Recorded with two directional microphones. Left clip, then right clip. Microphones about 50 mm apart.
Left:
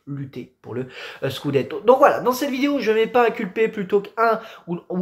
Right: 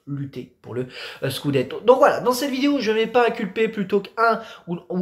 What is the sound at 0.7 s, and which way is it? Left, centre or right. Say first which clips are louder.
Speech: right 1 dB; centre.